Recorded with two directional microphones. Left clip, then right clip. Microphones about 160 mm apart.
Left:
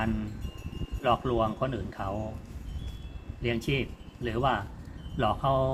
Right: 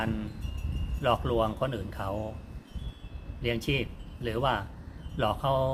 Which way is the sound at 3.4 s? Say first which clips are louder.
Even; 15° right (ahead or behind).